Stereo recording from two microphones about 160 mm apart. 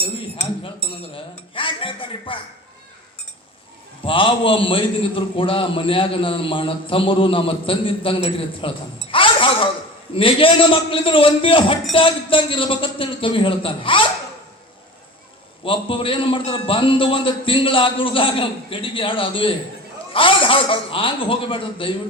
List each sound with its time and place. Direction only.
0.4 s chink: 35° left (ahead or behind)
4.0 s a man's voice: 35° left (ahead or behind)
9.0 s a sound: 35° left (ahead or behind)
10.2 s a man's voice: 35° left (ahead or behind)
15.6 s a man's voice: 35° left (ahead or behind)